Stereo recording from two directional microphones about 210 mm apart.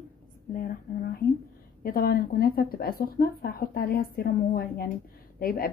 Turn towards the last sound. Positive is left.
turn(degrees=45)  # may be behind; listen again after turning